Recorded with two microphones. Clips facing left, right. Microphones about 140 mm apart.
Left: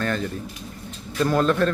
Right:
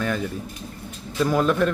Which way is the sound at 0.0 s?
10° right (ahead or behind).